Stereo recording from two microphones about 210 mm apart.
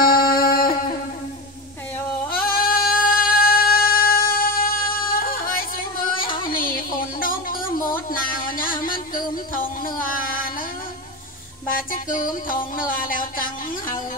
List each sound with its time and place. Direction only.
0.0 s music: 45° left (ahead or behind)
2.3 s a sound: 45° left (ahead or behind)
3.3 s music: 45° left (ahead or behind)
6.5 s a sound: 40° left (ahead or behind)
7.9 s music: 40° left (ahead or behind)
11.7 s music: 40° left (ahead or behind)